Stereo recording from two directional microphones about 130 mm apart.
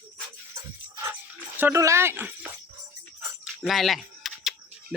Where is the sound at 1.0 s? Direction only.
15° right (ahead or behind).